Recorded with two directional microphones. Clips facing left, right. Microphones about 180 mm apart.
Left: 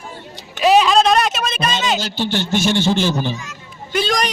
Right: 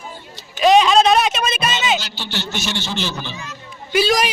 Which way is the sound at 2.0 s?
50° left (ahead or behind).